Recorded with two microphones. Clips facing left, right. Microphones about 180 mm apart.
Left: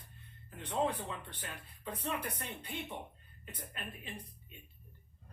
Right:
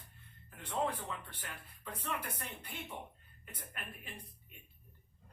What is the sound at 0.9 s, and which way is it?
Speech, 70° left (ahead or behind).